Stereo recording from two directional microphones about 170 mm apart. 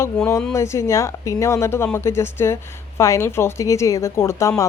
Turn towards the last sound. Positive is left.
turn(degrees=15)  # may be behind; listen again after turning